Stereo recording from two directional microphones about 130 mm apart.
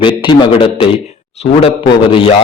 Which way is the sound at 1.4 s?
55° left (ahead or behind).